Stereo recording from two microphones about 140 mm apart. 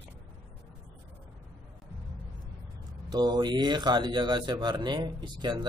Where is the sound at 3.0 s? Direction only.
30° right (ahead or behind).